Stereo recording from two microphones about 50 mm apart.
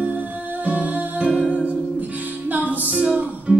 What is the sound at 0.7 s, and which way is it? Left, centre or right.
Music, right.